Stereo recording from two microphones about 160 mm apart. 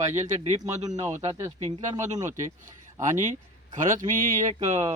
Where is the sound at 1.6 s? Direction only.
50° right (ahead or behind).